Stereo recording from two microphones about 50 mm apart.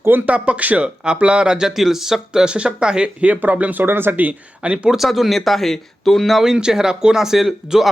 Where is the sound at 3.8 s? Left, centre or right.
Right.